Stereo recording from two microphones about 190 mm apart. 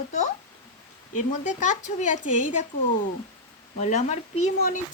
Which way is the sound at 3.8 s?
40° left (ahead or behind).